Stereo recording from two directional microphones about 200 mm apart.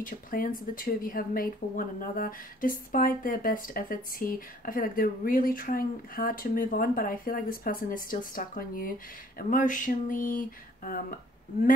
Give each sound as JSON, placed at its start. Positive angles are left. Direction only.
{"t": 0.0, "sound": "speech", "side_deg": 45}